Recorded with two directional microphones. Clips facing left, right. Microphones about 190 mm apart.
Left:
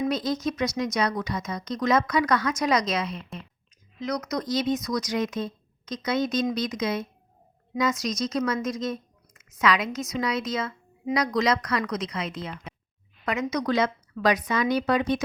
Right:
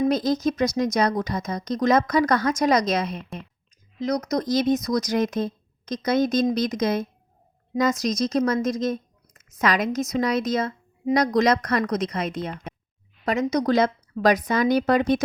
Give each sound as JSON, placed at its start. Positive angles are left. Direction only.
{"t": 0.1, "sound": "a woman's voice", "side_deg": -45}